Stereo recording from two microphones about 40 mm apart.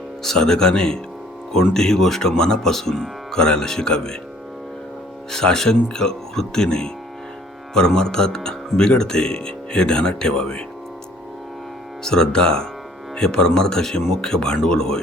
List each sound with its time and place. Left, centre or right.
0.2 s speech: centre
5.3 s speech: centre
12.0 s speech: centre